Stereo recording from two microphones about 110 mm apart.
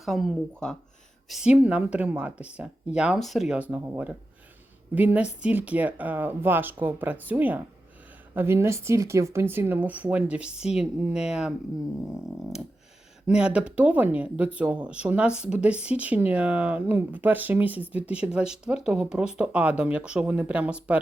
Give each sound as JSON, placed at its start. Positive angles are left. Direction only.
{"t": 0.0, "sound": "speech", "side_deg": 0}
{"t": 1.3, "sound": "speech", "side_deg": -10}
{"t": 4.9, "sound": "a woman's voice", "side_deg": -15}
{"t": 13.2, "sound": "speech", "side_deg": -10}